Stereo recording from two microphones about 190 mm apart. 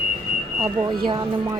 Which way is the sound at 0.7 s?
25° right (ahead or behind).